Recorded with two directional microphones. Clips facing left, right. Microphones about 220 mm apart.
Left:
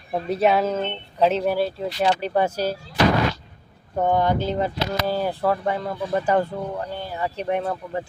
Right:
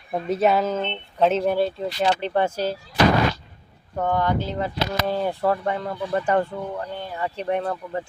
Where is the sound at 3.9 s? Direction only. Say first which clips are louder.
Left 3 dB; 20° left (ahead or behind).